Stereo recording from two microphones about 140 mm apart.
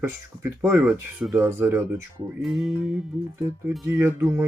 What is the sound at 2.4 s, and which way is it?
Music, centre (ahead or behind).